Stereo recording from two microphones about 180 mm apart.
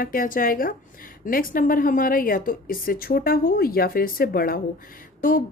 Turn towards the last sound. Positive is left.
turn(degrees=50)  # may be behind; listen again after turning